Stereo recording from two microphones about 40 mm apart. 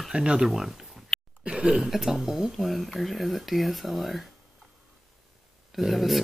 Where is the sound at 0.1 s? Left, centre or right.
Right.